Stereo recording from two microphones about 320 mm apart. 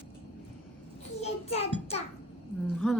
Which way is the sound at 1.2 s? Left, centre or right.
Centre.